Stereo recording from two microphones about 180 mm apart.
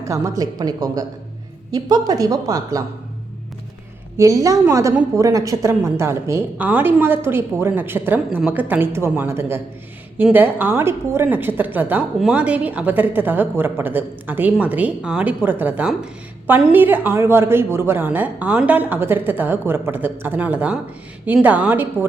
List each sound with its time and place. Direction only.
0.0 s speech: 20° right (ahead or behind)
4.2 s a woman's voice: 20° right (ahead or behind)